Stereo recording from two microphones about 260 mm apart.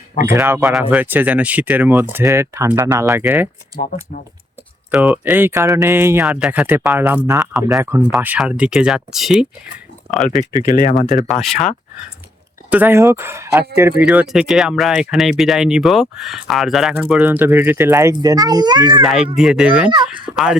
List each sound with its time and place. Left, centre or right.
0.3 s speech: centre
4.9 s speech: centre
10.9 s speech: centre
12.7 s speech: centre
19.0 s speech: centre